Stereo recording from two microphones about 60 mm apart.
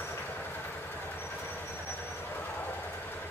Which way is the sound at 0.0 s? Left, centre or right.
Left.